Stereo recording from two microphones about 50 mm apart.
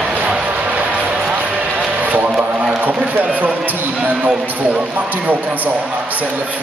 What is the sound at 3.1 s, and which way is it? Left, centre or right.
A man's voice, right.